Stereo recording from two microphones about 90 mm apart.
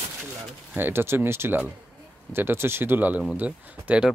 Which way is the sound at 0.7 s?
25° right (ahead or behind).